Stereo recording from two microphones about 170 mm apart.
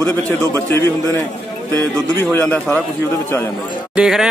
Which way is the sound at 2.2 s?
10° left (ahead or behind).